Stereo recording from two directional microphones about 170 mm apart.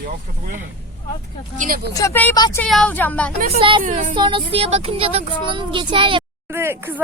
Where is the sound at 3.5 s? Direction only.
30° right (ahead or behind).